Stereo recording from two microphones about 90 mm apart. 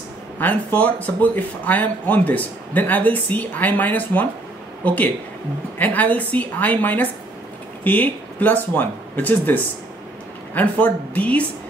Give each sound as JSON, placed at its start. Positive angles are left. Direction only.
{"t": 0.4, "sound": "speech", "side_deg": 20}